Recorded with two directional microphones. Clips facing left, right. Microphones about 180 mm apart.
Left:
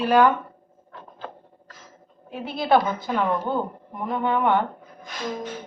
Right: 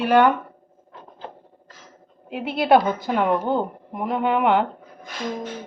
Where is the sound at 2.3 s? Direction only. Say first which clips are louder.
Right 3 dB; 10° right (ahead or behind).